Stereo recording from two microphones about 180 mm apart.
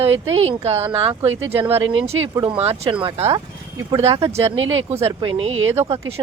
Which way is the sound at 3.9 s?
20° right (ahead or behind).